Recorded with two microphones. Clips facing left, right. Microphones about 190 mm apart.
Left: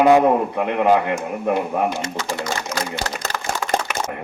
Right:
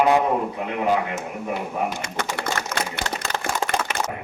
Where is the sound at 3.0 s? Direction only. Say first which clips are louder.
Left 2 dB; 35° left (ahead or behind).